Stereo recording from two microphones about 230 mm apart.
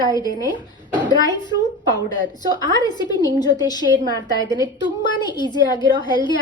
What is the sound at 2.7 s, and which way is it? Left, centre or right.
A woman's voice, centre.